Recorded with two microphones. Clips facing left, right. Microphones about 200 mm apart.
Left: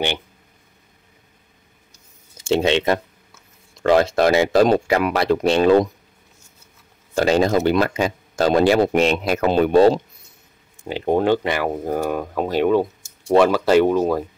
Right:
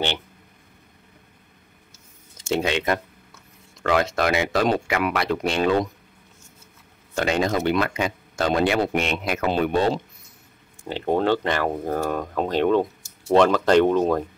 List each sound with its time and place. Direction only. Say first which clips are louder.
2.4 s speech: left 5 dB; 25° left (ahead or behind)
7.2 s speech: left 6 dB; 35° left (ahead or behind)
10.8 s speech: left 3 dB; 15° left (ahead or behind)